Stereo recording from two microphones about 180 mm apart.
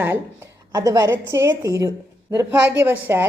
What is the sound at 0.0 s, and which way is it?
Speech, 15° right (ahead or behind).